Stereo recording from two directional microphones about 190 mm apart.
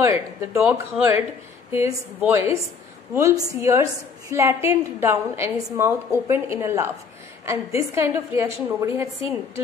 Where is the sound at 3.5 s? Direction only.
15° right (ahead or behind).